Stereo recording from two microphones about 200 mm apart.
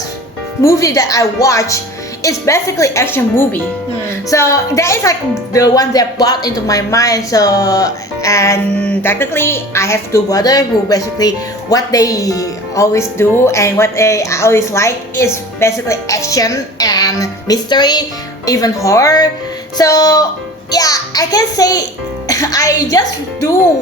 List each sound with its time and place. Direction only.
0.6 s a woman's voice: 15° left (ahead or behind)
19.7 s music: 20° left (ahead or behind)
20.7 s a woman's voice: 20° left (ahead or behind)